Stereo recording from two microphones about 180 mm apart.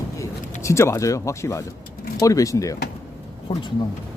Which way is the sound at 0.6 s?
15° left (ahead or behind).